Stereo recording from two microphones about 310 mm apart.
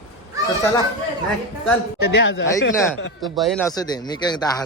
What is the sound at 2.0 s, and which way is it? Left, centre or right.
Speech, left.